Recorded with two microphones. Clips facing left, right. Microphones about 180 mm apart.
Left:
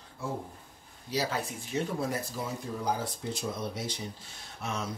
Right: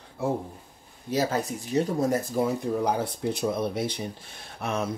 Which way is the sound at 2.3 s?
60° right (ahead or behind).